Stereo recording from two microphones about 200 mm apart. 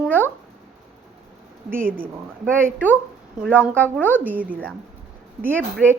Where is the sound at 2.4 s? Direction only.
5° left (ahead or behind).